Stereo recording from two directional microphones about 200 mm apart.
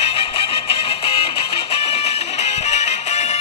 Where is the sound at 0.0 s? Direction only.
30° left (ahead or behind).